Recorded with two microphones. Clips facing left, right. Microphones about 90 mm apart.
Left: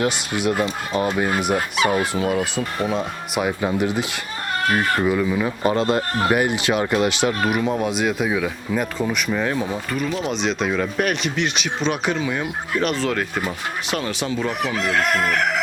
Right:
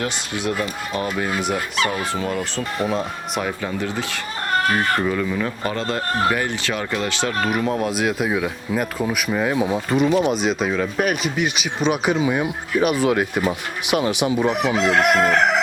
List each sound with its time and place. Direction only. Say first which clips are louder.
0.6 s speech: left 3 dB; 30° left (ahead or behind)
2.1 s speech: left 3 dB; 10° left (ahead or behind)
3.6 s speech: left 4 dB; 15° left (ahead or behind)
5.6 s speech: left 7 dB; 20° left (ahead or behind)
7.5 s speech: even; 5° left (ahead or behind); by 10.1 s 20° right (ahead or behind)
10.1 s speech: right 6 dB; 55° right (ahead or behind)
10.4 s speech: right 1 dB; 5° right (ahead or behind)
14.8 s chicken: right 4 dB; 20° right (ahead or behind)